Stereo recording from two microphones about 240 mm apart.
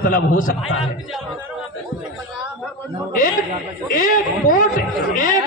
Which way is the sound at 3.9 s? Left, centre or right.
Left.